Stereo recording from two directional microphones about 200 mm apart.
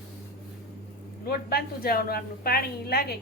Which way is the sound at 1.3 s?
50° left (ahead or behind).